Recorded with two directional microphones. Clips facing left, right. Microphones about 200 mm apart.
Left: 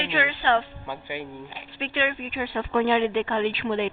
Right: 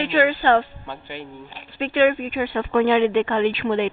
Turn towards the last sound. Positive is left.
turn(degrees=-60)  # may be behind; listen again after turning